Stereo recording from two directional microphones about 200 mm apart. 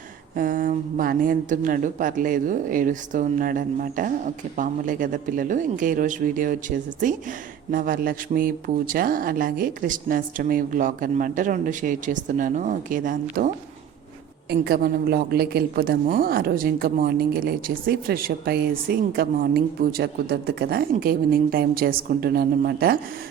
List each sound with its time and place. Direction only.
0.3 s a woman's voice: 45° right (ahead or behind)
14.5 s a woman's voice: 50° right (ahead or behind)